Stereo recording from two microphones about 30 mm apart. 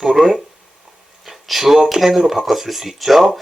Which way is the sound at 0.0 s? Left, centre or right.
Centre.